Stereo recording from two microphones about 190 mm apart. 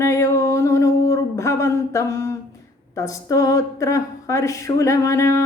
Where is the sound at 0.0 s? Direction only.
15° left (ahead or behind).